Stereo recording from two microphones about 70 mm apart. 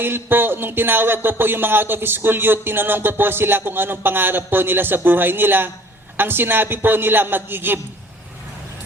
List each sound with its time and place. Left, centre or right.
0.0 s speech: right